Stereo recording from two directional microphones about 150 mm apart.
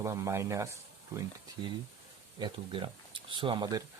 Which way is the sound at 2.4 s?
30° right (ahead or behind).